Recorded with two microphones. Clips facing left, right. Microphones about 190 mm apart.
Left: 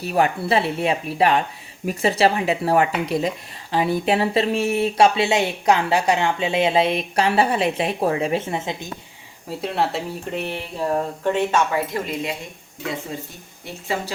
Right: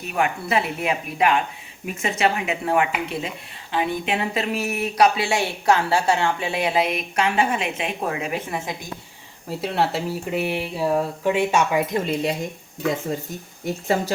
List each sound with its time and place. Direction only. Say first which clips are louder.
0.0 s speech: left 4 dB; 35° left (ahead or behind)
9.5 s speech: even; centre (ahead or behind)
12.0 s speech: right 4 dB; 35° right (ahead or behind)
13.7 s speech: right 5 dB; 45° right (ahead or behind)